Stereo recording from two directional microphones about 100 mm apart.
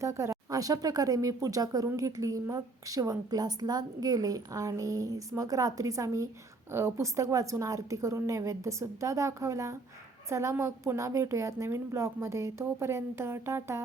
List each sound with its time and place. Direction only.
0.0 s a woman's voice: 30° right (ahead or behind)